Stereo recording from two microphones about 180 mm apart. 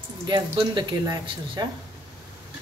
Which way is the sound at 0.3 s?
25° right (ahead or behind).